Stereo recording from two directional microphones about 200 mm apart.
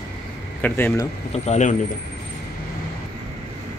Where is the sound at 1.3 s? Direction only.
35° left (ahead or behind).